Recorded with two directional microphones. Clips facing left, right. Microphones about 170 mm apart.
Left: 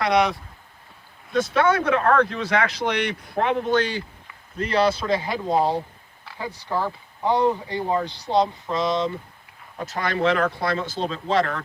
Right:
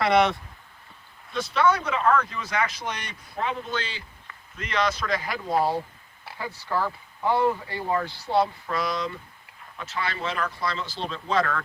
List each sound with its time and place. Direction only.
0.0 s speech: centre (ahead or behind)
1.3 s speech: 50° left (ahead or behind)
4.5 s speech: 35° left (ahead or behind)
9.7 s speech: 40° left (ahead or behind)
10.2 s speech: 65° left (ahead or behind); by 11.6 s 25° left (ahead or behind)